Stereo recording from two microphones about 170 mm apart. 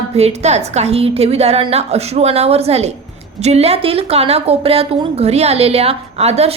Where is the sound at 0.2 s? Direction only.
40° right (ahead or behind).